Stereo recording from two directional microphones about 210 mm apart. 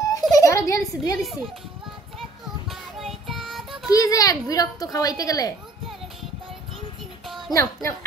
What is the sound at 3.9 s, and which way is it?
A woman's voice, 15° left (ahead or behind).